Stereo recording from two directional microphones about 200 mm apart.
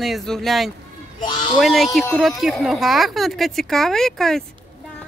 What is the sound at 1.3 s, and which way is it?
Owl, 25° left (ahead or behind).